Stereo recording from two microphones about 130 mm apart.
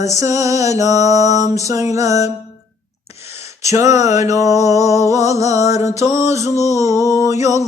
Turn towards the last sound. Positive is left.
turn(degrees=-25)  # may be behind; listen again after turning